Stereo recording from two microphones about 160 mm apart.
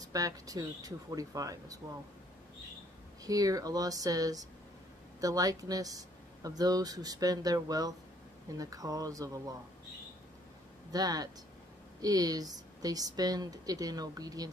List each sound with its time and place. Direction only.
0.1 s a woman's voice: 20° right (ahead or behind)
3.3 s a woman's voice: 20° right (ahead or behind)
10.9 s a woman's voice: 25° right (ahead or behind)